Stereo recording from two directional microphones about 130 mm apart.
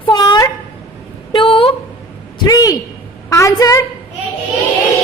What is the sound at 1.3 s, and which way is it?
Speech, 45° left (ahead or behind).